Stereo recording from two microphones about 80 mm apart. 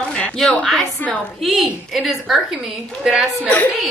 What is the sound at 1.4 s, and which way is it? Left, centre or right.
A woman's voice, centre.